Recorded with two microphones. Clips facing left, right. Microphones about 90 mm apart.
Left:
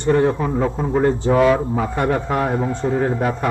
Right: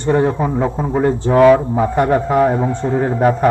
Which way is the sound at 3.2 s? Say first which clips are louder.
Right 7 dB; 40° right (ahead or behind).